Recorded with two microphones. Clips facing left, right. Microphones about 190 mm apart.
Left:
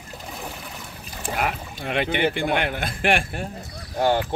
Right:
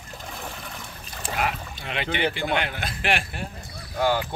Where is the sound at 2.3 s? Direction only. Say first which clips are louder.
Left 3 dB; 50° left (ahead or behind).